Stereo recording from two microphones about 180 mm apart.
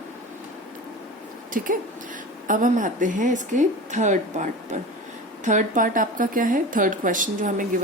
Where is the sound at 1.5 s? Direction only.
45° right (ahead or behind).